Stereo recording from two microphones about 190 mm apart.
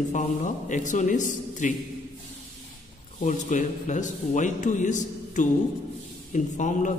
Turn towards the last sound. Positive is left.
turn(degrees=40)  # may be behind; listen again after turning